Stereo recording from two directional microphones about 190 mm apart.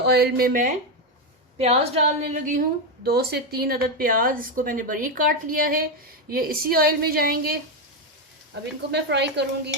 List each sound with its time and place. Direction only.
0.0 s a woman's voice: 60° right (ahead or behind)
1.5 s a woman's voice: 35° right (ahead or behind)
3.0 s speech: 55° right (ahead or behind)
8.9 s a woman's voice: 65° right (ahead or behind)